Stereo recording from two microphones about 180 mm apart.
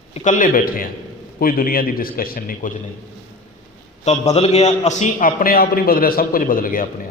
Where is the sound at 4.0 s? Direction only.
40° left (ahead or behind).